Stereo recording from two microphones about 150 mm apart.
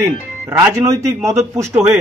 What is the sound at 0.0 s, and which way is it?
A man's voice, 15° right (ahead or behind).